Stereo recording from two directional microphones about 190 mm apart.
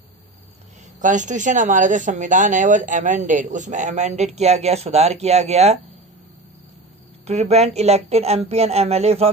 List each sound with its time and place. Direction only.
1.0 s speech: 40° right (ahead or behind)
7.2 s speech: 35° right (ahead or behind)